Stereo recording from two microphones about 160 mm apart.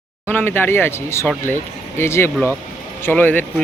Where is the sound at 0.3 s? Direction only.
15° left (ahead or behind).